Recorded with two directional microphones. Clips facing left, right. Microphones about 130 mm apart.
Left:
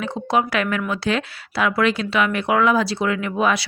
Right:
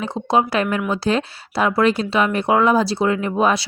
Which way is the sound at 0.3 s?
30° right (ahead or behind).